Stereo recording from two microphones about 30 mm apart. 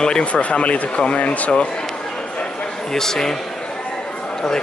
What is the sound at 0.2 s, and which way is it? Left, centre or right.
Speech, left.